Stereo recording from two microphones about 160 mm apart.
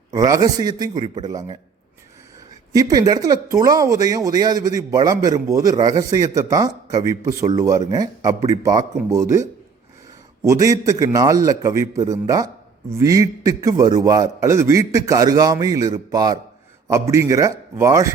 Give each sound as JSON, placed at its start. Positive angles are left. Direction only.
{"t": 0.1, "sound": "speech", "side_deg": -25}
{"t": 2.7, "sound": "speech", "side_deg": -25}